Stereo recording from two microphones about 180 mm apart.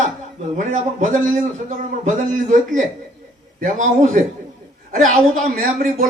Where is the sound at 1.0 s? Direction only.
45° right (ahead or behind).